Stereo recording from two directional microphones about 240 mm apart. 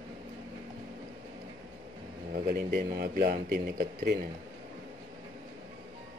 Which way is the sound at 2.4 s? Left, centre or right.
Right.